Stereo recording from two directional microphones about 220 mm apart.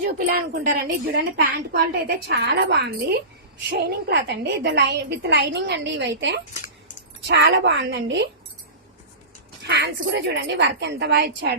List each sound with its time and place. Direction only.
0.0 s a woman's voice: 40° right (ahead or behind)
9.6 s a woman's voice: 50° right (ahead or behind)